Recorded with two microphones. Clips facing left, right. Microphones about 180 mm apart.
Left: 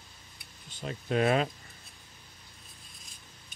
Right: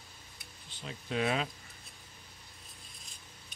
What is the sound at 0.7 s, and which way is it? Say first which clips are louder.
Speech: left 6 dB; 50° left (ahead or behind).